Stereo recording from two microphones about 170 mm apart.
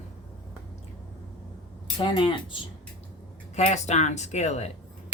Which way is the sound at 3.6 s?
40° left (ahead or behind).